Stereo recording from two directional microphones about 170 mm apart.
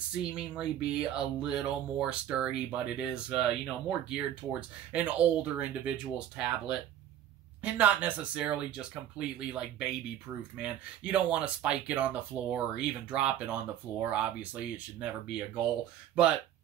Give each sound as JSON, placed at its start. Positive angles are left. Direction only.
{"t": 0.1, "sound": "speech", "side_deg": -5}